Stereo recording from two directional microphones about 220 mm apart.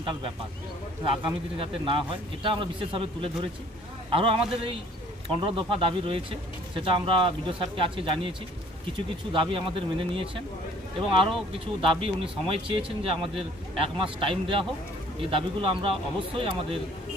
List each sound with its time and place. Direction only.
0.0 s speech: 25° right (ahead or behind)